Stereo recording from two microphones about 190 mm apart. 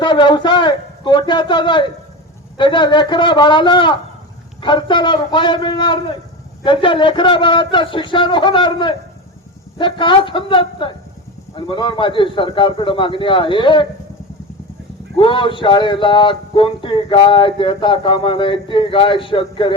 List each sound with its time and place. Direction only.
0.0 s speech: 25° left (ahead or behind)
15.2 s speech: 25° left (ahead or behind)